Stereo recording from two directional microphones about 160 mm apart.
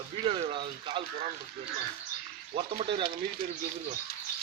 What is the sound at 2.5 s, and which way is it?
Speech, 35° right (ahead or behind).